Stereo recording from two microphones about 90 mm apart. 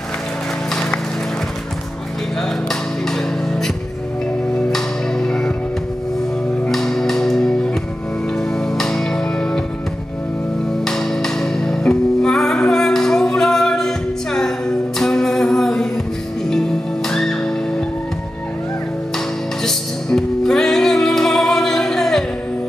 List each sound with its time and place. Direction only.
2.7 s music: 5° left (ahead or behind)
4.7 s music: 5° left (ahead or behind)
6.7 s music: 5° left (ahead or behind)
10.8 s music: 5° left (ahead or behind)
19.1 s music: 5° left (ahead or behind)